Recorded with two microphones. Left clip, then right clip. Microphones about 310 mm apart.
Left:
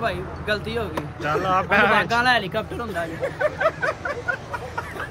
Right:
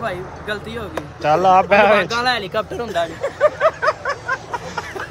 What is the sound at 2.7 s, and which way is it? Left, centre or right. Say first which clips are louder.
Speech: right 6 dB; right.